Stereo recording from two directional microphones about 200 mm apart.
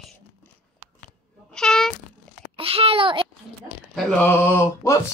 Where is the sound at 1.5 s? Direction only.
5° left (ahead or behind).